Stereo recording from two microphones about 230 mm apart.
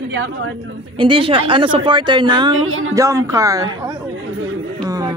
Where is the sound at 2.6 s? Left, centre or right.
Right.